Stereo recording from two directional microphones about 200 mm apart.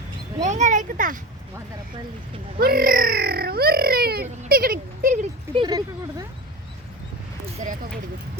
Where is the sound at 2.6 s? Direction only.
50° right (ahead or behind).